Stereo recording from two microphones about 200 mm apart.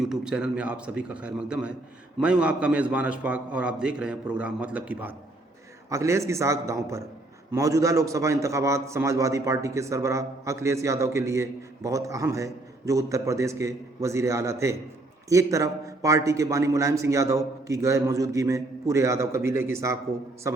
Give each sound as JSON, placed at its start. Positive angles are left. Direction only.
{"t": 0.0, "sound": "a man's voice", "side_deg": -5}